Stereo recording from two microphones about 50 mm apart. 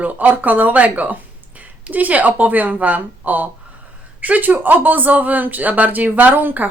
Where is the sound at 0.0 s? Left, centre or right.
Right.